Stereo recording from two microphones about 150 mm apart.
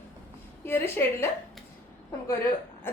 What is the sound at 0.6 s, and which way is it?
Speech, 15° left (ahead or behind).